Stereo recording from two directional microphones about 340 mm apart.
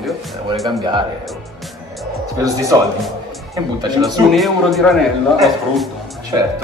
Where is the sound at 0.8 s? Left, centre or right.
Centre.